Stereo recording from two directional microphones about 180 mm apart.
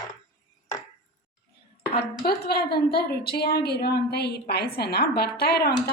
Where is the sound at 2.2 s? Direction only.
60° left (ahead or behind).